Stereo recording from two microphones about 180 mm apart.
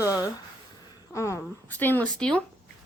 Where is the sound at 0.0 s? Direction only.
20° left (ahead or behind).